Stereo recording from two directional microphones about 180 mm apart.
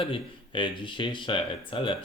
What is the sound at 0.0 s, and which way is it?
Speech, 30° left (ahead or behind).